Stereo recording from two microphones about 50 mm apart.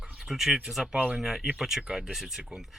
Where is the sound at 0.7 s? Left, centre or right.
Centre.